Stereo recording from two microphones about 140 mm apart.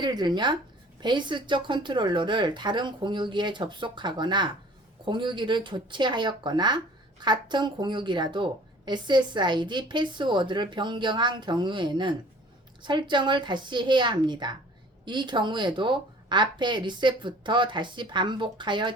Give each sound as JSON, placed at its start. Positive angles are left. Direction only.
{"t": 0.0, "sound": "speech", "side_deg": -30}